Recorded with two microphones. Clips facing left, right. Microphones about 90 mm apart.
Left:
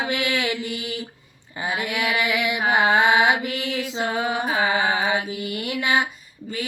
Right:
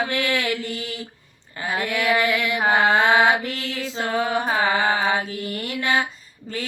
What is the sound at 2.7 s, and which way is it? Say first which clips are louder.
Female singing: even; 15° left (ahead or behind).